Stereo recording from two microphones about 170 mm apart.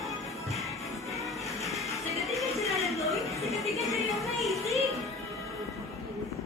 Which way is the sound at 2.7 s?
Centre (ahead or behind).